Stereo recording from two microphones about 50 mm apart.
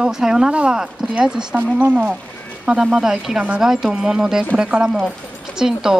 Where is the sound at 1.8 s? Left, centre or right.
Right.